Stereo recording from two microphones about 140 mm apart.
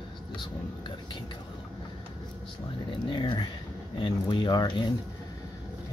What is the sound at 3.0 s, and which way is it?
Speech, 35° left (ahead or behind).